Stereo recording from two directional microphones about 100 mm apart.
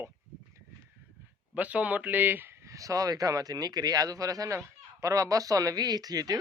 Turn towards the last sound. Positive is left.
turn(degrees=-40)  # may be behind; listen again after turning